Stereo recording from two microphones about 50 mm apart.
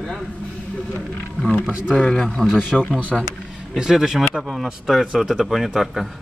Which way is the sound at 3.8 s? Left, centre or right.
Centre.